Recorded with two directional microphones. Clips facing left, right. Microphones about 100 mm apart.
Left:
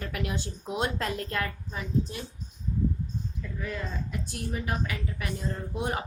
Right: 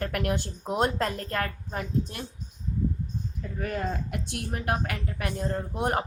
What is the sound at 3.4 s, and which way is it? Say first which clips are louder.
Speech: right 6 dB; 55° right (ahead or behind).